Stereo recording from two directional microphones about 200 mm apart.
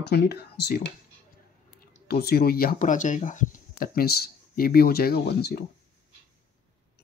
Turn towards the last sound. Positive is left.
turn(degrees=50)  # may be behind; listen again after turning